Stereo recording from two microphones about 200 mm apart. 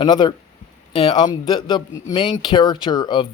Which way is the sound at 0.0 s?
25° left (ahead or behind).